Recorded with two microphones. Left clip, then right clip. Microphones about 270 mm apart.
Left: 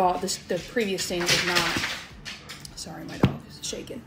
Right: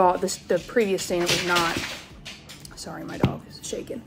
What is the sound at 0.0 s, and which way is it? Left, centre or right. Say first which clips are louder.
Speech: right 3 dB; centre.